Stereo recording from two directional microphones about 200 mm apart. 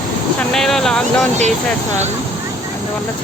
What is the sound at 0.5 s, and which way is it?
Speech, centre (ahead or behind).